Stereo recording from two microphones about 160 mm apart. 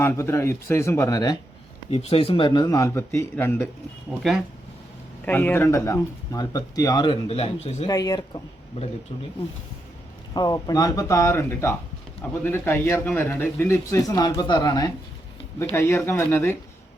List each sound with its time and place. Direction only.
0.0 s speech: 15° left (ahead or behind)
1.9 s speech: 40° left (ahead or behind); by 3.7 s 15° left (ahead or behind)
4.2 s speech: centre (ahead or behind)
5.2 s speech: 10° left (ahead or behind); by 7.9 s 40° left (ahead or behind)
7.9 s speech: 25° left (ahead or behind)
10.3 s speech: 25° left (ahead or behind)